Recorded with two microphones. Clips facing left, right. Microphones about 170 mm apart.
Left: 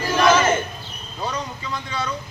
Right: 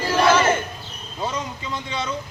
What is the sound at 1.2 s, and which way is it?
Speech, 25° right (ahead or behind).